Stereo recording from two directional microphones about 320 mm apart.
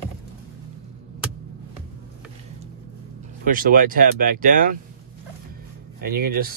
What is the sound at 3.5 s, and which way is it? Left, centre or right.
Speech, right.